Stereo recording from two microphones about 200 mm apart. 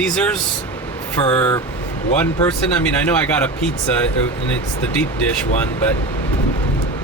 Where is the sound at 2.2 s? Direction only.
10° left (ahead or behind).